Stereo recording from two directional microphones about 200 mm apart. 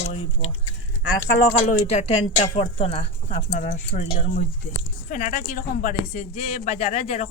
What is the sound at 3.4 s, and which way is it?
Speech, 40° left (ahead or behind).